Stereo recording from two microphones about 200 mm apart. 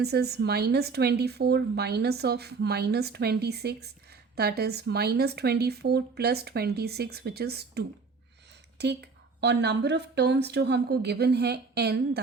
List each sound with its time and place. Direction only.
0.0 s a woman's voice: 55° right (ahead or behind)